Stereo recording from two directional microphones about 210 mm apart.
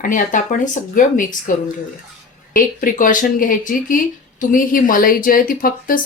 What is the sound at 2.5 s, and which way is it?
Speech, 40° left (ahead or behind).